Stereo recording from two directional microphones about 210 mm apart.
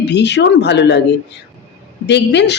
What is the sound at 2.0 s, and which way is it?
Speech, 55° left (ahead or behind).